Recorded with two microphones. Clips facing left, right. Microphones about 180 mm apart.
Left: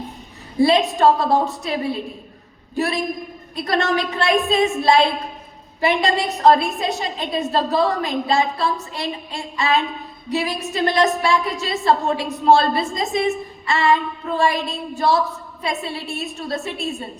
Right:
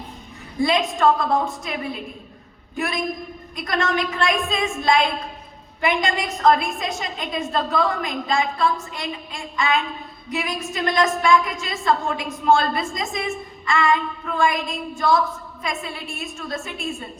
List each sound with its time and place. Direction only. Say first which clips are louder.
0.6 s a woman's voice: left 4 dB; 35° left (ahead or behind)